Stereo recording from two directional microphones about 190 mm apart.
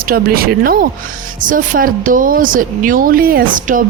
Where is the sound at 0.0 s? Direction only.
50° right (ahead or behind).